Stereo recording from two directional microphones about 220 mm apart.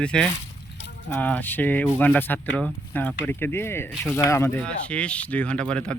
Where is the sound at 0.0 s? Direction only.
5° left (ahead or behind).